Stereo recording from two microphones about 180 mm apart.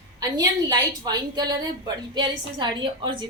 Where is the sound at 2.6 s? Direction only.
25° right (ahead or behind).